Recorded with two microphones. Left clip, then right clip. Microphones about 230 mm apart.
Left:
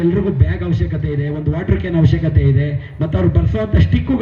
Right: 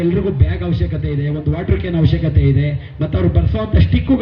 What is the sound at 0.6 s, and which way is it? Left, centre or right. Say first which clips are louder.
A man's voice: even; left.